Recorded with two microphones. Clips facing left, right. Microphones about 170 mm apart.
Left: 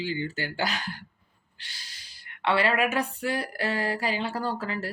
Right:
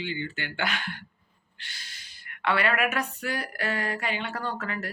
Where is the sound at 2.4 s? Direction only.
30° left (ahead or behind).